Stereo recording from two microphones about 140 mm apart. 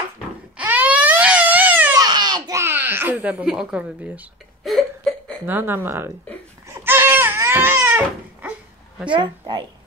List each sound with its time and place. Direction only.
0.6 s baby cry: 10° right (ahead or behind)
2.0 s a sound: 30° right (ahead or behind); by 4.3 s 10° right (ahead or behind)
4.6 s a sound: centre (ahead or behind)
5.4 s speech: 15° right (ahead or behind)
6.7 s crying: 15° right (ahead or behind)
9.1 s a woman's voice: 35° right (ahead or behind)